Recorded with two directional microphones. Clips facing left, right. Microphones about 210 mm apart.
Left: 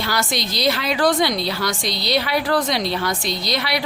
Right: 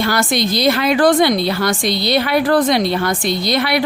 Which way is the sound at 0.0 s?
50° right (ahead or behind).